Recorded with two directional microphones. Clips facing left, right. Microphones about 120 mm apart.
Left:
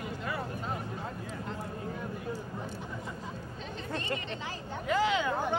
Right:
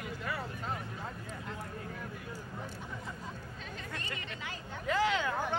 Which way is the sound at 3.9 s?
25° left (ahead or behind).